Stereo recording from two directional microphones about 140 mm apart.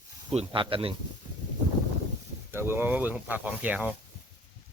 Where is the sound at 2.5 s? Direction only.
15° right (ahead or behind).